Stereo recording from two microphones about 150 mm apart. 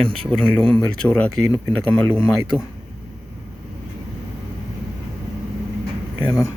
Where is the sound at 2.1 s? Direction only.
5° right (ahead or behind).